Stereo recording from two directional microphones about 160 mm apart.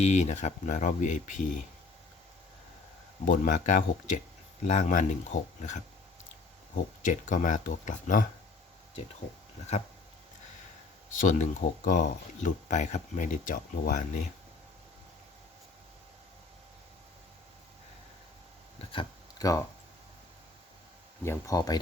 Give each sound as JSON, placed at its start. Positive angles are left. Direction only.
{"t": 0.0, "sound": "speech", "side_deg": 45}
{"t": 3.2, "sound": "speech", "side_deg": 55}
{"t": 11.2, "sound": "speech", "side_deg": 55}
{"t": 18.9, "sound": "a sound", "side_deg": 25}
{"t": 21.2, "sound": "speech", "side_deg": 20}